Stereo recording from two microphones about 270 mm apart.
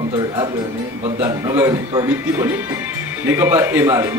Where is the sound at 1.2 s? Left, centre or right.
Centre.